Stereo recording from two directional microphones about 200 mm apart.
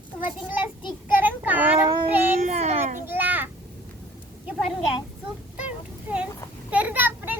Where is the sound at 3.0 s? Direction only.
10° right (ahead or behind).